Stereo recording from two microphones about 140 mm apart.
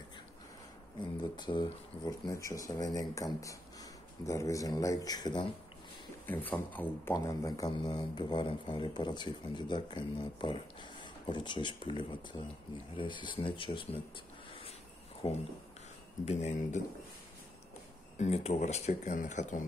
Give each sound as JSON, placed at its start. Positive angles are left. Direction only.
{"t": 1.3, "sound": "speech", "side_deg": 30}
{"t": 6.2, "sound": "speech", "side_deg": 10}
{"t": 7.2, "sound": "speech", "side_deg": 25}
{"t": 16.3, "sound": "speech", "side_deg": 55}
{"t": 18.1, "sound": "speech", "side_deg": 55}